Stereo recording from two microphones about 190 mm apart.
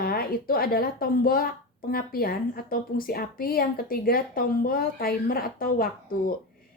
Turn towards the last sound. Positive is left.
turn(degrees=50)  # may be behind; listen again after turning